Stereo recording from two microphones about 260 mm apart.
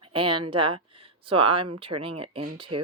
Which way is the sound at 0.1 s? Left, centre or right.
Centre.